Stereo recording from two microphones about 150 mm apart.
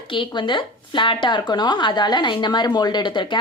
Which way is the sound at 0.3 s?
30° left (ahead or behind).